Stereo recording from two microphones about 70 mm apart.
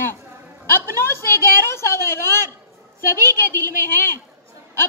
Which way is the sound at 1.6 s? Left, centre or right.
Left.